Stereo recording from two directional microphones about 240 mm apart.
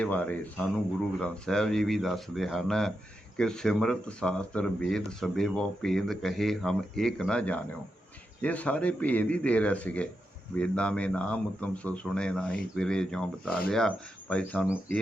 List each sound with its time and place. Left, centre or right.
0.0 s speech: centre